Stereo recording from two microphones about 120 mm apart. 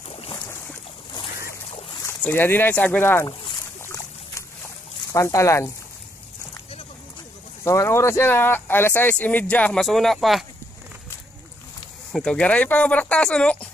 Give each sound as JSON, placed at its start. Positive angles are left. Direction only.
{"t": 0.1, "sound": "boat", "side_deg": 50}
{"t": 0.4, "sound": "boat", "side_deg": 10}
{"t": 1.7, "sound": "boat", "side_deg": 50}
{"t": 2.0, "sound": "speech", "side_deg": 15}
{"t": 3.8, "sound": "a sound", "side_deg": 25}
{"t": 5.1, "sound": "speech", "side_deg": 25}
{"t": 7.6, "sound": "speech", "side_deg": 25}
{"t": 12.1, "sound": "speech", "side_deg": 5}